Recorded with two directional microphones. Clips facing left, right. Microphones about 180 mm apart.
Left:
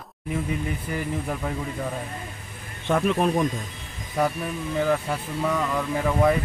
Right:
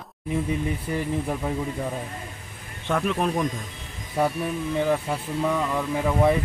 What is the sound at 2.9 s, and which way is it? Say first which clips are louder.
Speech: left 3 dB; 5° left (ahead or behind).